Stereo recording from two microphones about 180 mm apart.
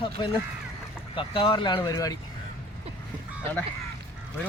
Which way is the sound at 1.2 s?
30° left (ahead or behind).